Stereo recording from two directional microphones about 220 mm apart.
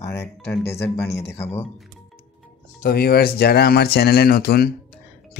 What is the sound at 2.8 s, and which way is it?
Speech, 45° left (ahead or behind).